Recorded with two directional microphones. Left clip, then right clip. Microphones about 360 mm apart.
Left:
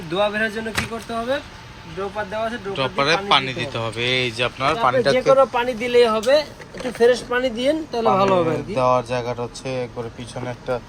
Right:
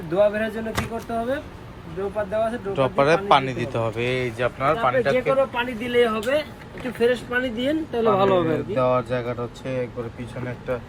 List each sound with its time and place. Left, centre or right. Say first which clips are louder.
0.1 s speech: even; centre